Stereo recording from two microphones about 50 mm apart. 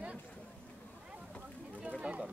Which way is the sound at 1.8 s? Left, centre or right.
Right.